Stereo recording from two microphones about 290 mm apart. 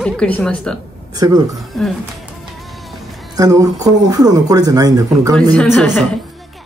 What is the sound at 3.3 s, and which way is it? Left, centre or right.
Speech, centre.